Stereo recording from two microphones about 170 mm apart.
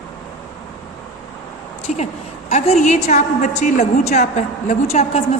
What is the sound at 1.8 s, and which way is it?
A woman's voice, 40° left (ahead or behind).